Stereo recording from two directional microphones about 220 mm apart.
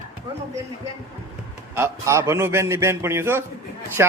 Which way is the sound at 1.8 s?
10° right (ahead or behind).